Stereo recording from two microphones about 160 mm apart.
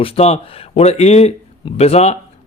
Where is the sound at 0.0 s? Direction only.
40° left (ahead or behind).